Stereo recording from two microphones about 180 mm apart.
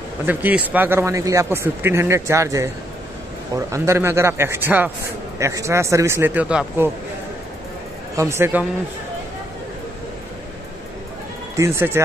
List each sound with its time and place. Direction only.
0.3 s speech: 10° right (ahead or behind)
8.2 s speech: 15° right (ahead or behind)
11.5 s speech: 15° right (ahead or behind)